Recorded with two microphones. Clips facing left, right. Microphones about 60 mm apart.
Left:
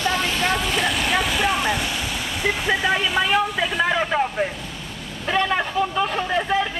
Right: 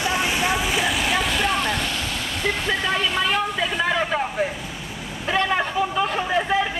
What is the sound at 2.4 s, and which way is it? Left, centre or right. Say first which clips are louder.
Vehicle: left 3 dB; centre.